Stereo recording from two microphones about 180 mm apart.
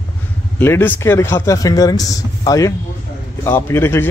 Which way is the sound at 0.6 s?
10° left (ahead or behind).